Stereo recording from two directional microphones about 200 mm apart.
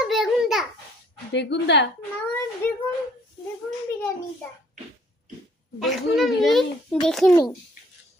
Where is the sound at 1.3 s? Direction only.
60° left (ahead or behind).